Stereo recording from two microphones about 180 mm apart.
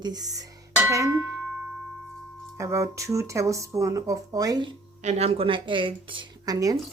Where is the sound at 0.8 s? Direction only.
15° right (ahead or behind).